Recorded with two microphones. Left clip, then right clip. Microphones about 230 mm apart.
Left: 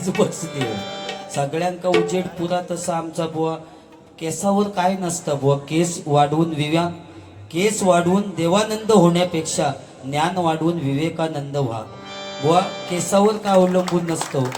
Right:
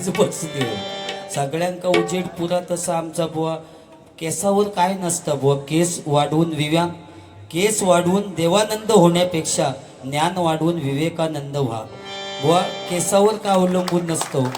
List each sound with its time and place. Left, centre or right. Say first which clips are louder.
0.0 s a man's voice: right 1 dB; right